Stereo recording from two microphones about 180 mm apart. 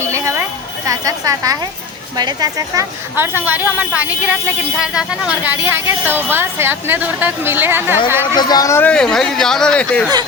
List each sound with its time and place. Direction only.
0.1 s a sound: 15° right (ahead or behind)
0.9 s a woman's voice: 20° right (ahead or behind)
8.4 s speech: 20° left (ahead or behind); by 10.1 s 5° left (ahead or behind)